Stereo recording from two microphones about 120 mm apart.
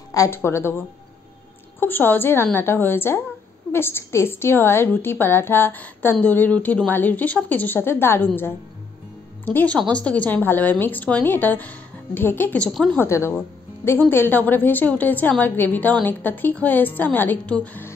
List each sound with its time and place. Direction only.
0.1 s a woman's voice: 25° left (ahead or behind)
9.4 s a woman's voice: 15° left (ahead or behind)
13.0 s a woman's voice: 20° left (ahead or behind)